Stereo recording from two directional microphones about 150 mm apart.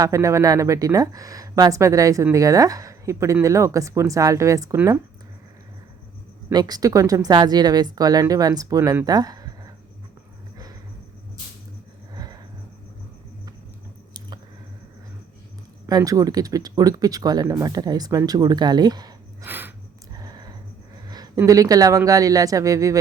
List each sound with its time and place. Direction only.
0.0 s speech: 20° right (ahead or behind)
6.5 s speech: 25° right (ahead or behind)
12.1 s vehicle: 25° right (ahead or behind)
15.9 s speech: 25° right (ahead or behind)
19.5 s a sound: 15° right (ahead or behind)
20.1 s a sound: 25° right (ahead or behind)
21.1 s speech: 25° right (ahead or behind)